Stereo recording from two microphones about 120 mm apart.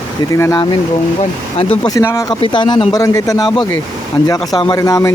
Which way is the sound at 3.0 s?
25° left (ahead or behind).